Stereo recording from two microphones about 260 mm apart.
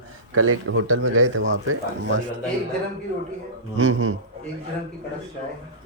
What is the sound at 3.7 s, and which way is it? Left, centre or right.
Speech, right.